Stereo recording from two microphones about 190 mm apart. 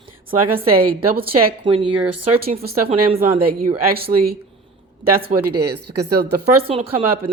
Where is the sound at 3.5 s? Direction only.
50° right (ahead or behind).